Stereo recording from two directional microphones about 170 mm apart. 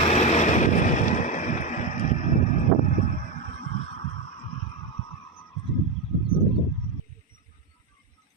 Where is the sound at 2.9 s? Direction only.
45° left (ahead or behind).